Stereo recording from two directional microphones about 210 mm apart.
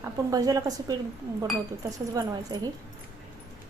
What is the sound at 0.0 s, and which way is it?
Speech, 15° right (ahead or behind).